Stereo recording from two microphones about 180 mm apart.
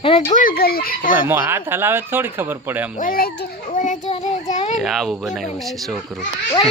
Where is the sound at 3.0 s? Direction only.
50° left (ahead or behind).